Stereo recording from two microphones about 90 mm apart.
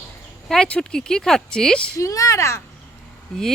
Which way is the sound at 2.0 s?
40° left (ahead or behind).